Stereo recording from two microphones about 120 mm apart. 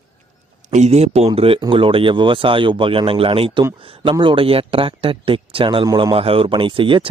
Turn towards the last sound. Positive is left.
turn(degrees=-45)  # may be behind; listen again after turning